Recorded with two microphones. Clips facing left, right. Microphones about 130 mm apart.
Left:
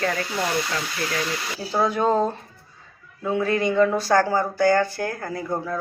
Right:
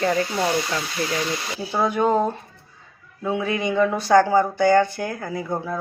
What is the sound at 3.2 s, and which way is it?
Speech, 10° right (ahead or behind).